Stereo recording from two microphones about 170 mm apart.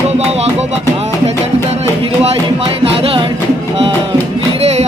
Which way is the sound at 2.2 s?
35° right (ahead or behind).